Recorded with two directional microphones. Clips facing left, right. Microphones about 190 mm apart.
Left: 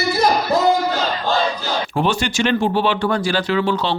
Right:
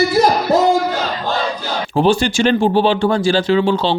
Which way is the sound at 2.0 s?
30° right (ahead or behind).